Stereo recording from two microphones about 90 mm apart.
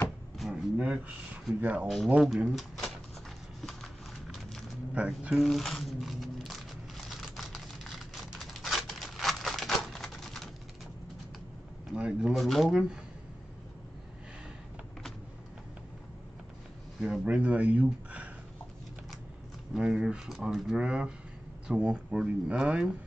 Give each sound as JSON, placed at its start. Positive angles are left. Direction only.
{"t": 0.4, "sound": "speech", "side_deg": -10}
{"t": 2.1, "sound": "speech", "side_deg": -5}
{"t": 3.6, "sound": "horse", "side_deg": 5}
{"t": 4.9, "sound": "speech", "side_deg": -15}
{"t": 5.3, "sound": "a sound", "side_deg": 0}
{"t": 11.9, "sound": "speech", "side_deg": -10}
{"t": 12.4, "sound": "speech", "side_deg": 0}
{"t": 17.0, "sound": "speech", "side_deg": -5}
{"t": 19.7, "sound": "speech", "side_deg": -10}